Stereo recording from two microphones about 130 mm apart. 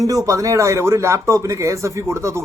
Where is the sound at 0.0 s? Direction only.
25° right (ahead or behind).